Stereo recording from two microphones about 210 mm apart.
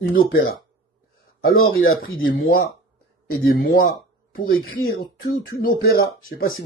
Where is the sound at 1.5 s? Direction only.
80° left.